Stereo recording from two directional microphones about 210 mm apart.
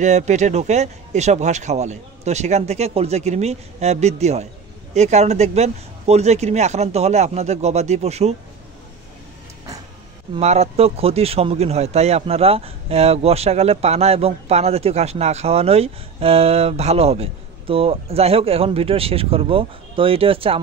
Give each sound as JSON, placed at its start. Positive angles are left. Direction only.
{"t": 0.0, "sound": "speech", "side_deg": -35}
{"t": 10.3, "sound": "speech", "side_deg": -30}